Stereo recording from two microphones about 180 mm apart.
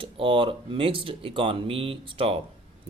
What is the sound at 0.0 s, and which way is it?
Speech, 30° right (ahead or behind).